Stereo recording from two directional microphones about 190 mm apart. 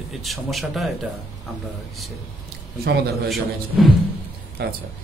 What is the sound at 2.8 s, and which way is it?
Speech, 55° right (ahead or behind).